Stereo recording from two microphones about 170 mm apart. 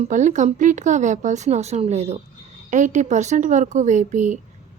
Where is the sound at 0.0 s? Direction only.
45° right (ahead or behind).